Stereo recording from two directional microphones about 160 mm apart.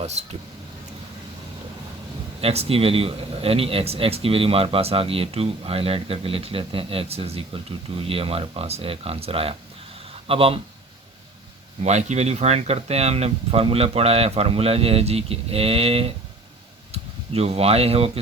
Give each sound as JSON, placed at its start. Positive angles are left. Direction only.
{"t": 0.0, "sound": "speech", "side_deg": -40}
{"t": 2.4, "sound": "speech", "side_deg": -40}
{"t": 10.1, "sound": "a sound", "side_deg": -35}
{"t": 11.8, "sound": "speech", "side_deg": -45}